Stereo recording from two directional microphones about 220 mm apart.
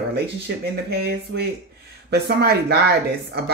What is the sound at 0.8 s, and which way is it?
Speech, 45° right (ahead or behind).